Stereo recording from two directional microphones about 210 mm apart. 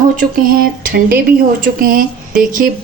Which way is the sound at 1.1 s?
45° right (ahead or behind).